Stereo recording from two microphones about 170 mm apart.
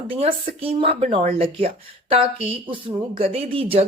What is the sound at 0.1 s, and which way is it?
Speech, 35° right (ahead or behind).